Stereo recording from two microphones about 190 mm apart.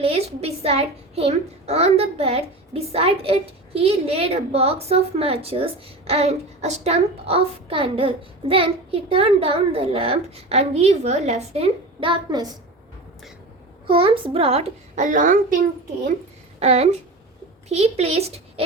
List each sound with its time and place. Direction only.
0.0 s a woman's voice: 30° right (ahead or behind)
13.8 s a woman's voice: 30° right (ahead or behind)
16.6 s a woman's voice: 35° right (ahead or behind)